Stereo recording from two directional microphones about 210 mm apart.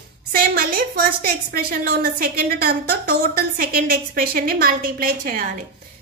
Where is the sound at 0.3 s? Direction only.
45° right (ahead or behind).